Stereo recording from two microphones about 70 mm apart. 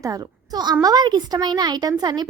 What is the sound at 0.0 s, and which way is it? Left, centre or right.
A woman's voice, right.